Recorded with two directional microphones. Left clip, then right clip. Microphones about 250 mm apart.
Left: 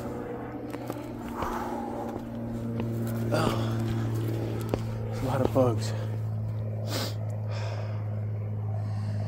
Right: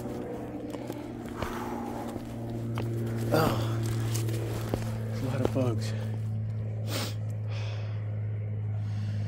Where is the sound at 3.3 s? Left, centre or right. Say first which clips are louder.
Right 2 dB; centre.